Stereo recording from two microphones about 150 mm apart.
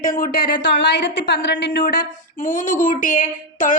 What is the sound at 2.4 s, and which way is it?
Female singing, 60° left (ahead or behind).